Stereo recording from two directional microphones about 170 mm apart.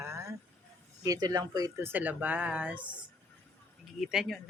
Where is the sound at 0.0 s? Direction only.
15° right (ahead or behind).